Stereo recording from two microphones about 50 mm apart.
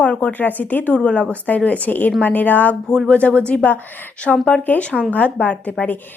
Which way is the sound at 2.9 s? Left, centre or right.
Centre.